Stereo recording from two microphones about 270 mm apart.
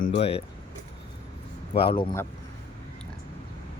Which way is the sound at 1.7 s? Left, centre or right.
Centre.